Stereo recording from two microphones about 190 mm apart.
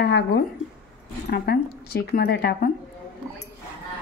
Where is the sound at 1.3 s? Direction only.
55° left (ahead or behind).